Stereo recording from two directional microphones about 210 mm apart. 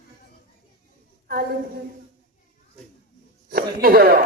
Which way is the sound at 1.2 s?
45° right (ahead or behind).